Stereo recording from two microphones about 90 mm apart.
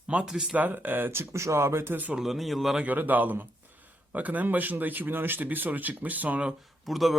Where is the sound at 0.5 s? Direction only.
20° right (ahead or behind).